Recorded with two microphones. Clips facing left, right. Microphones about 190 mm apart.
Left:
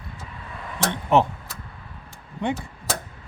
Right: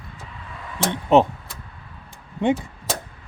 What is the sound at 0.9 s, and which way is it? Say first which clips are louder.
Speech: right 4 dB; 20° right (ahead or behind).